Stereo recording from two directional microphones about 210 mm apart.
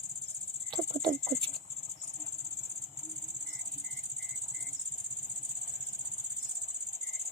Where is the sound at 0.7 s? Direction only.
20° right (ahead or behind).